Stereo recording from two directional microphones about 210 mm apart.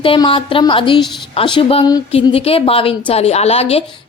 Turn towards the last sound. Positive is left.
turn(degrees=30)  # may be behind; listen again after turning